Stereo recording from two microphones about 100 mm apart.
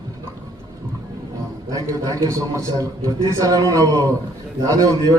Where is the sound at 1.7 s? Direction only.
35° right (ahead or behind).